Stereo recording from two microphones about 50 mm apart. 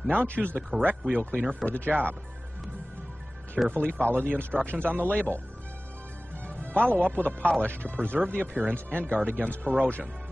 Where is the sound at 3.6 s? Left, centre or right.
Centre.